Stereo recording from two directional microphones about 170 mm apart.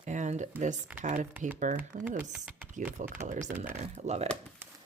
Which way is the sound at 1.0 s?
45° right (ahead or behind).